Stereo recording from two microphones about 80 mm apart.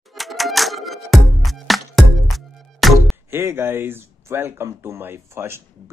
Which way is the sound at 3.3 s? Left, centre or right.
Right.